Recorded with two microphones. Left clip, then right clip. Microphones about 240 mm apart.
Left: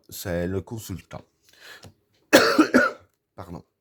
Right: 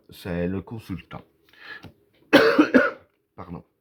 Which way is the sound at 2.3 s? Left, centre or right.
Left.